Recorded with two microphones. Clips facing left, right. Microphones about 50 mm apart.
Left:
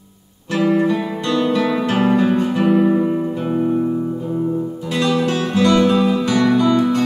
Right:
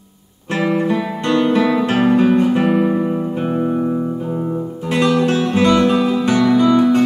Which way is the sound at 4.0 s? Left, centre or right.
Right.